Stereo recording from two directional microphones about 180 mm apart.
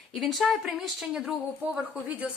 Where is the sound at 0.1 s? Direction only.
Centre (ahead or behind).